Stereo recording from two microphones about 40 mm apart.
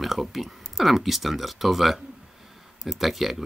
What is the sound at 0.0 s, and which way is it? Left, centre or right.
Speech, centre.